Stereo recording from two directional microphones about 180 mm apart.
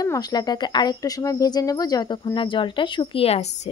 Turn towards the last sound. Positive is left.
turn(degrees=35)  # may be behind; listen again after turning